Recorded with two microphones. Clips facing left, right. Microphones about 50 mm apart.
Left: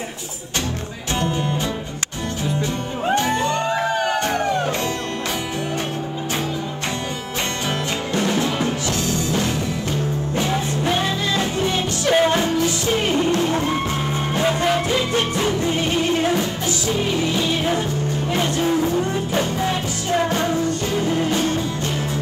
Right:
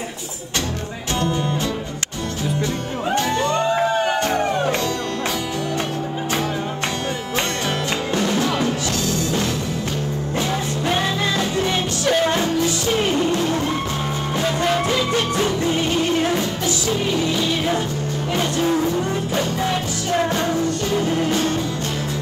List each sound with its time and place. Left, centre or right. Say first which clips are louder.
3.1 s music: even; left
4.4 s music: right 1 dB; right
8.2 s music: even; left
11.6 s music: even; right
12.1 s music: left 2 dB; left